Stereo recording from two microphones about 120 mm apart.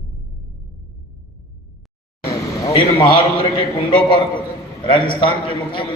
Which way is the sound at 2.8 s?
40° left (ahead or behind).